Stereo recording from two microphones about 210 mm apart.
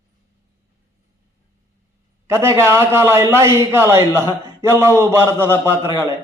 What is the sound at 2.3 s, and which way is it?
A man's voice, 15° right (ahead or behind).